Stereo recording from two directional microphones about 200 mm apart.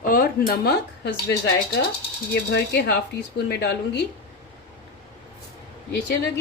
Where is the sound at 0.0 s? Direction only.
45° left (ahead or behind).